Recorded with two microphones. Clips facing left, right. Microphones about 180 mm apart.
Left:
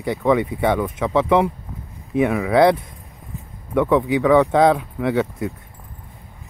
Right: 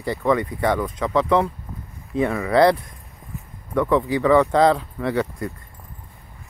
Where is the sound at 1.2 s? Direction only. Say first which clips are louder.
Left 3 dB; 15° left (ahead or behind).